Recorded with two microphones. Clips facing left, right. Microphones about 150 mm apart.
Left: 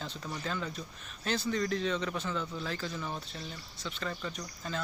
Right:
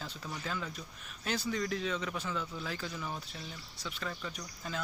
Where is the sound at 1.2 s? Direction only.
10° right (ahead or behind).